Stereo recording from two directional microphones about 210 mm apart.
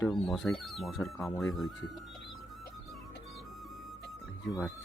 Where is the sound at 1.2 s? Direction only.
15° left (ahead or behind).